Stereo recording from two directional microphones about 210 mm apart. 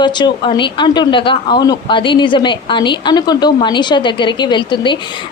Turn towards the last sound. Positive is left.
turn(degrees=20)  # may be behind; listen again after turning